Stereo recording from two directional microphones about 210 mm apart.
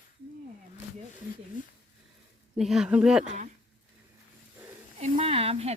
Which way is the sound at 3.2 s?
35° right (ahead or behind).